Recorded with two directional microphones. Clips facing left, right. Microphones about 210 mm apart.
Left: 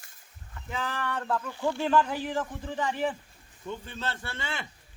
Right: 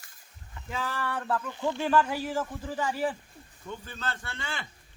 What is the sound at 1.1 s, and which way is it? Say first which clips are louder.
Speech: even; 5° right (ahead or behind).